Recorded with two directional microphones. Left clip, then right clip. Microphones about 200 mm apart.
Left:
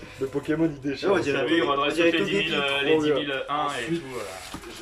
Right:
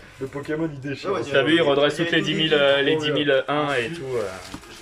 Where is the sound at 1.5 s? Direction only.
50° right (ahead or behind).